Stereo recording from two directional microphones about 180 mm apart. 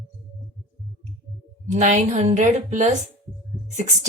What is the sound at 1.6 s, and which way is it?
Speech, 40° right (ahead or behind).